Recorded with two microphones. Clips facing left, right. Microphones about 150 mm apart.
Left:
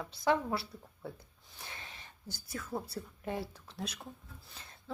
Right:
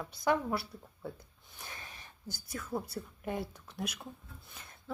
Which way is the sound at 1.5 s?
25° left (ahead or behind).